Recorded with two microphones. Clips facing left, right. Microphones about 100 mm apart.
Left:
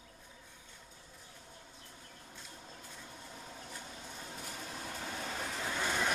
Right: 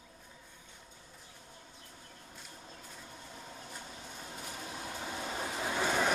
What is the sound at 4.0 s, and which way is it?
Vehicle, centre (ahead or behind).